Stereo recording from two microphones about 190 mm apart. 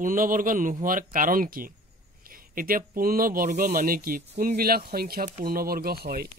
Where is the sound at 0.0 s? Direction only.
45° right (ahead or behind).